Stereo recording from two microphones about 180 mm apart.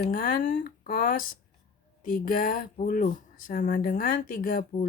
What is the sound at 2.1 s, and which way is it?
Speech, 50° left (ahead or behind).